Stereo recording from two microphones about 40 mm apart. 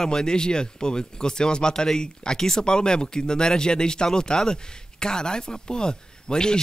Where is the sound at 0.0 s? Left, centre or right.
Centre.